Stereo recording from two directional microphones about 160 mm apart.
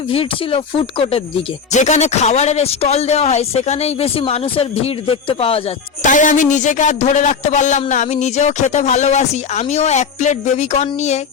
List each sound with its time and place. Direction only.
0.1 s speech: 35° left (ahead or behind)
1.7 s speech: 45° left (ahead or behind)
6.0 s a man's voice: 50° left (ahead or behind)